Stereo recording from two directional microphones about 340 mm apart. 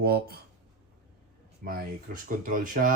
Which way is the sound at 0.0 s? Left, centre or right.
Right.